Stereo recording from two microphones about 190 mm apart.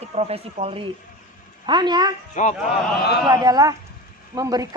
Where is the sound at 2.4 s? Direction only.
40° left (ahead or behind).